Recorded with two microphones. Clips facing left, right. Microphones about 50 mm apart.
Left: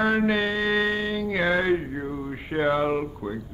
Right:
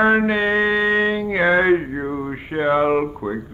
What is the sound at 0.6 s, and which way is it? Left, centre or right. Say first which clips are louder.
Music: right 5 dB; right.